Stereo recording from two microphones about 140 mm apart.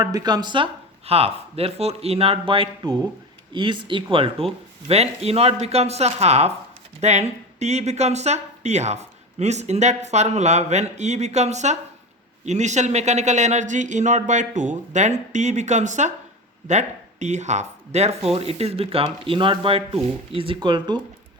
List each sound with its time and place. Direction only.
0.0 s speech: 25° right (ahead or behind)